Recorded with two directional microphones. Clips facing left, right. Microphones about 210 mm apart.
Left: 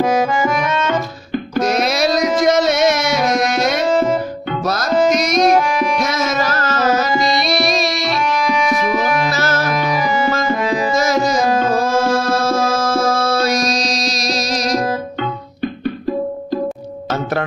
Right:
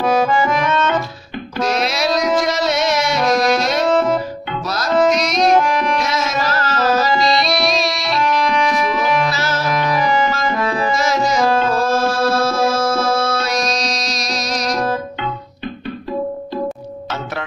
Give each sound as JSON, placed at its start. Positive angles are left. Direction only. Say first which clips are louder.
{"t": 0.0, "sound": "accordion", "louder": "even", "side_deg": 10}
{"t": 1.6, "sound": "music", "louder": "left 2 dB", "side_deg": 45}
{"t": 3.8, "sound": "music", "louder": "even", "side_deg": 0}
{"t": 5.7, "sound": "tabla", "louder": "even", "side_deg": 10}
{"t": 6.0, "sound": "music", "louder": "left 2 dB", "side_deg": 50}
{"t": 9.3, "sound": "music", "louder": "left 3 dB", "side_deg": 50}
{"t": 9.8, "sound": "music", "louder": "right 1 dB", "side_deg": 10}
{"t": 11.4, "sound": "tabla", "louder": "even", "side_deg": 15}
{"t": 13.2, "sound": "music", "louder": "left 3 dB", "side_deg": 40}